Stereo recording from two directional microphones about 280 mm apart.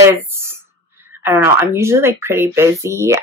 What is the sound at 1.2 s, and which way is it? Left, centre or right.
Speech, centre.